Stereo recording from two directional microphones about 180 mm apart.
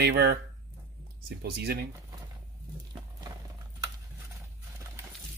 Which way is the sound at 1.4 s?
60° right (ahead or behind).